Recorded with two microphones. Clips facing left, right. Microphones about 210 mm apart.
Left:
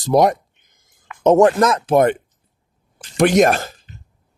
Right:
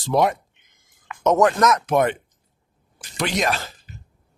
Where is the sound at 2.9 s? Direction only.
50° left (ahead or behind).